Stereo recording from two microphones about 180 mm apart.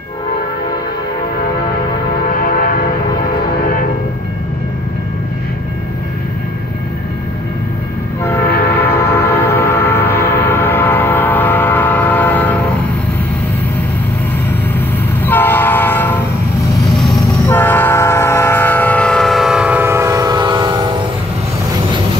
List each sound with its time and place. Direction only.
2.4 s train: 50° left (ahead or behind)
8.5 s train: 60° left (ahead or behind)
8.7 s train: 10° left (ahead or behind)
15.2 s train: 10° left (ahead or behind)
17.5 s train: 10° left (ahead or behind); by 21.0 s 25° right (ahead or behind)